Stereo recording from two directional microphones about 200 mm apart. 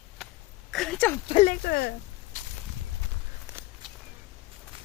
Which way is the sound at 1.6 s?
55° left (ahead or behind).